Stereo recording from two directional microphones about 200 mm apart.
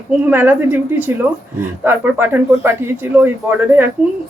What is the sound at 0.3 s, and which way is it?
Speech, 10° right (ahead or behind).